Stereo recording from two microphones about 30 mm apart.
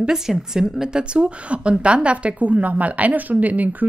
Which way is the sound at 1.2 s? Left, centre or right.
Right.